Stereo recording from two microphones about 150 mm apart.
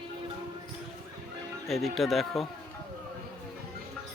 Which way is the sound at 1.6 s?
Centre (ahead or behind).